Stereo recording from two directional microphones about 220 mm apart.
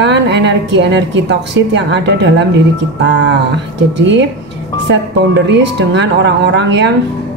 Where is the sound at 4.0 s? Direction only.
55° right (ahead or behind).